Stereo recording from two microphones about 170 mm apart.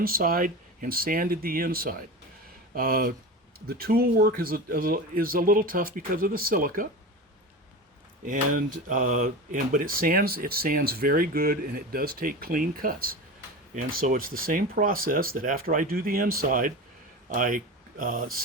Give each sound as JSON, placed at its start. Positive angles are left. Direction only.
{"t": 0.0, "sound": "speech", "side_deg": -60}
{"t": 8.2, "sound": "speech", "side_deg": -55}